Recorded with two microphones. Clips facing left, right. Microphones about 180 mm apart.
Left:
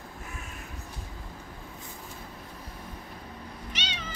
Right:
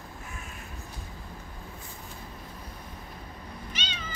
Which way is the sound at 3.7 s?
85° left.